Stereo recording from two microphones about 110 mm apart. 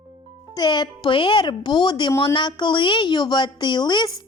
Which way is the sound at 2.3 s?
45° left (ahead or behind).